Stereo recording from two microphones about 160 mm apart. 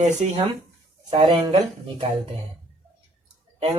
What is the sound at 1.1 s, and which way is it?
Speech, 30° right (ahead or behind).